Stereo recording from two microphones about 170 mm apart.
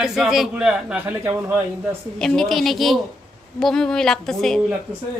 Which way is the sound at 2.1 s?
5° left (ahead or behind).